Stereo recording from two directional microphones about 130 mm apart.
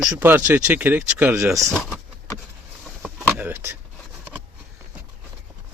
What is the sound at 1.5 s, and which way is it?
Speech, 25° right (ahead or behind).